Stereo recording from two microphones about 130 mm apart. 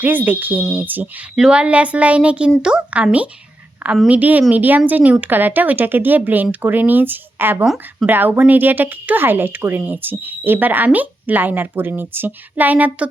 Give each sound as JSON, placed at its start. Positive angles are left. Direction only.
{"t": 0.0, "sound": "speech", "side_deg": -15}